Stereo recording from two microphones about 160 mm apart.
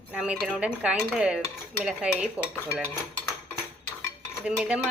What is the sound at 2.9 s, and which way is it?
Dishes, 15° left (ahead or behind).